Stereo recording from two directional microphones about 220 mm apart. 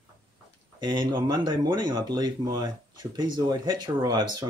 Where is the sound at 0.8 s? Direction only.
20° right (ahead or behind).